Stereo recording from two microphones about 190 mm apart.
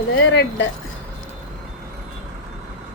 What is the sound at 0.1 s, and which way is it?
Speech, 85° left.